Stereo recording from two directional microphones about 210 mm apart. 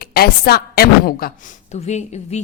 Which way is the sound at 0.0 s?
45° left (ahead or behind).